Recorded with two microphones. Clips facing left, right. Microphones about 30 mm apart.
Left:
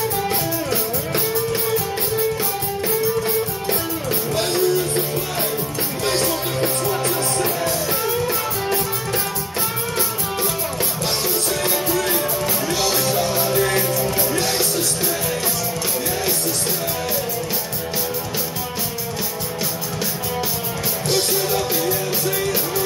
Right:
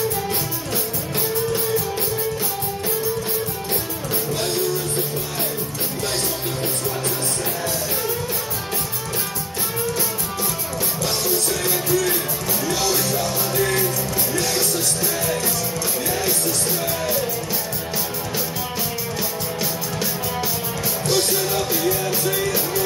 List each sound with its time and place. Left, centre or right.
4.4 s music: left
11.6 s music: left
12.6 s music: left
21.1 s music: centre